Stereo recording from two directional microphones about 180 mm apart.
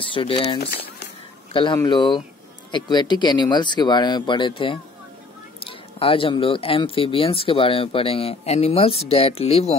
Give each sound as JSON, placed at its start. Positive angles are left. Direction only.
{"t": 0.1, "sound": "speech", "side_deg": 30}